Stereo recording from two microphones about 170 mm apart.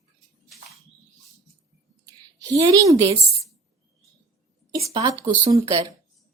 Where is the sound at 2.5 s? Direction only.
20° right (ahead or behind).